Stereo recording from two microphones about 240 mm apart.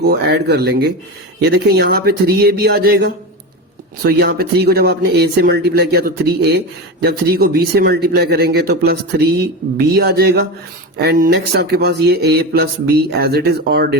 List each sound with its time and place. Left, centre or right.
0.1 s speech: right